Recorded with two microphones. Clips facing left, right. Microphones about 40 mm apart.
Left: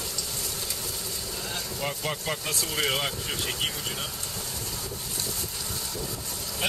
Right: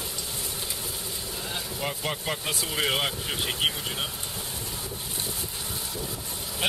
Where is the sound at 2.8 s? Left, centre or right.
Centre.